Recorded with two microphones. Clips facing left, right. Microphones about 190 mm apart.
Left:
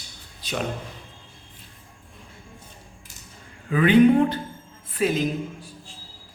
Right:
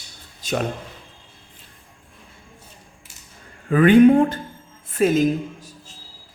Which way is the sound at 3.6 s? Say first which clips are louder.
Right 4 dB; 50° right (ahead or behind).